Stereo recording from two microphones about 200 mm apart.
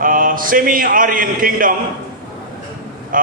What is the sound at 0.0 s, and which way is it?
A man's voice, 45° right (ahead or behind).